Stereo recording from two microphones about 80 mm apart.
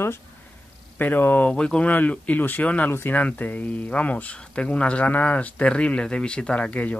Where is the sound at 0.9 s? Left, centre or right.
Left.